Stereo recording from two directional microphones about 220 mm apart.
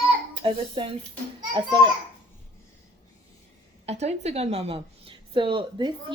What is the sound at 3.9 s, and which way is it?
Speech, 30° right (ahead or behind).